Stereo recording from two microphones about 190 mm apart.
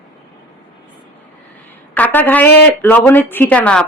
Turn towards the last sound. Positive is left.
turn(degrees=5)  # may be behind; listen again after turning